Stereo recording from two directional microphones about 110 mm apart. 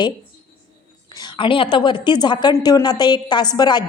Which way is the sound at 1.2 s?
50° left (ahead or behind).